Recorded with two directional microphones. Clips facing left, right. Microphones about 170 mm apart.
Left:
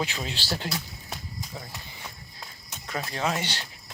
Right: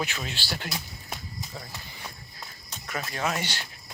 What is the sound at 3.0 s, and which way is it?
Speech, 25° left (ahead or behind).